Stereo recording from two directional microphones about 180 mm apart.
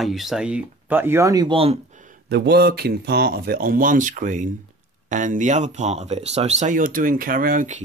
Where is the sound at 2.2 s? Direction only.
65° right (ahead or behind).